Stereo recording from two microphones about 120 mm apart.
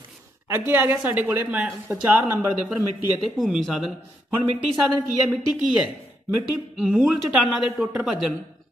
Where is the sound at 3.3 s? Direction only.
Centre (ahead or behind).